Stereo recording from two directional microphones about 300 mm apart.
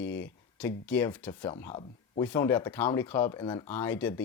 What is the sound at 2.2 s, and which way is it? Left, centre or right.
Speech, centre.